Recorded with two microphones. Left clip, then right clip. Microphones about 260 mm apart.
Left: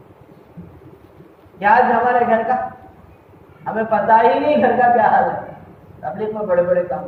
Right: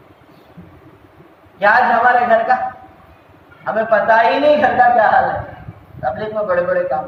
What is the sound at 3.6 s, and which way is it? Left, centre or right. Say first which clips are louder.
Speech: right 3 dB; right.